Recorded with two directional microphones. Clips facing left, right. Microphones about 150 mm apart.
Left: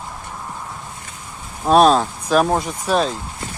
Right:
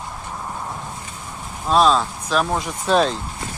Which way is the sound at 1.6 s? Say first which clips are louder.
Left 4 dB; 55° left (ahead or behind).